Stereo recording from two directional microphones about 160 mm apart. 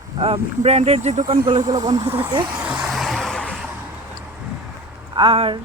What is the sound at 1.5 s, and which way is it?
Speech, 25° right (ahead or behind).